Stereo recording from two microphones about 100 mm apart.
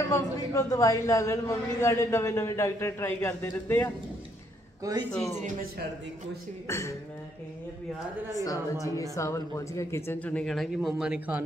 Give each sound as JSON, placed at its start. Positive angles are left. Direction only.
{"t": 0.1, "sound": "a man's voice", "side_deg": 30}
{"t": 4.9, "sound": "speech", "side_deg": -40}
{"t": 6.7, "sound": "a woman's voice", "side_deg": 30}
{"t": 8.7, "sound": "a woman's voice", "side_deg": 35}
{"t": 10.1, "sound": "speech", "side_deg": 15}
{"t": 10.4, "sound": "speech", "side_deg": 0}